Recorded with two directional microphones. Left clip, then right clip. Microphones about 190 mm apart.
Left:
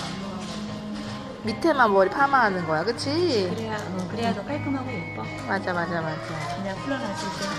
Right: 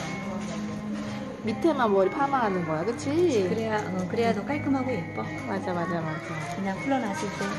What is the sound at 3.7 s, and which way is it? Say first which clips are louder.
Speech: right 3 dB; 55° right (ahead or behind).